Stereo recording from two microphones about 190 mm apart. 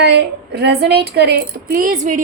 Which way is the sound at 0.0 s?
60° right (ahead or behind).